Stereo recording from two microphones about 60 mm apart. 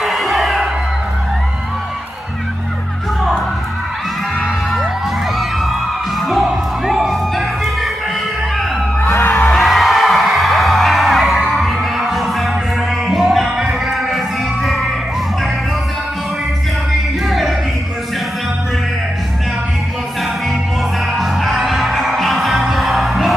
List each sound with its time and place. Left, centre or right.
0.0 s music: centre
6.2 s music: centre
9.0 s music: left
9.5 s music: centre
21.2 s music: centre